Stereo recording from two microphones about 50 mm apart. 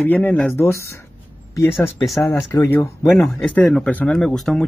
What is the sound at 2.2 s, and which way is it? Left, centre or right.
Speech, left.